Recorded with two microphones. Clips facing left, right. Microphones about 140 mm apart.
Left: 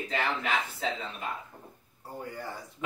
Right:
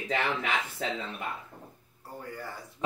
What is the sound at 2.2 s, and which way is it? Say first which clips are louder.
Speech: left 2 dB; 20° left (ahead or behind).